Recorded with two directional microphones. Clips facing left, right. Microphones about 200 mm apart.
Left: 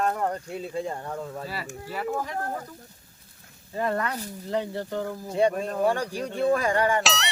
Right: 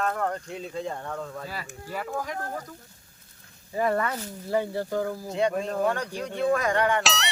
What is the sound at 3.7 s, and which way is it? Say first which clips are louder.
Speech: right 2 dB; 10° right (ahead or behind).